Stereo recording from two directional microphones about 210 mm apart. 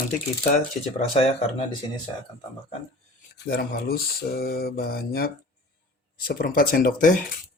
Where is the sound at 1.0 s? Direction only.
30° left (ahead or behind).